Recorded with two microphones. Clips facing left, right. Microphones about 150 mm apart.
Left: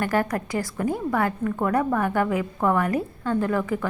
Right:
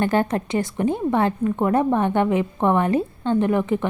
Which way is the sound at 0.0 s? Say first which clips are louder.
Right 3 dB; 25° right (ahead or behind).